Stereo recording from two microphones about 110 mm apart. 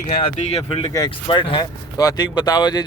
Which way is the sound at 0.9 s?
45° left (ahead or behind).